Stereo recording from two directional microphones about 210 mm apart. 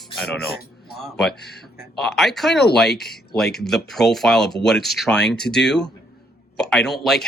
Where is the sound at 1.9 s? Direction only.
Centre (ahead or behind).